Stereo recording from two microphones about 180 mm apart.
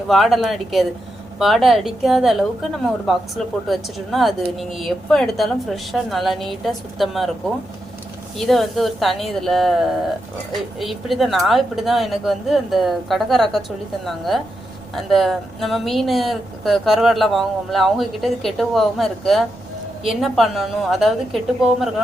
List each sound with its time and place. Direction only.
0.1 s speech: centre (ahead or behind)
8.4 s speech: centre (ahead or behind)